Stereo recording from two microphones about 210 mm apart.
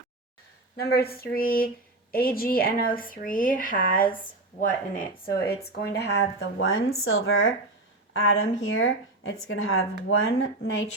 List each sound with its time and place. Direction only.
0.8 s speech: 50° left (ahead or behind); by 10.8 s 70° left (ahead or behind)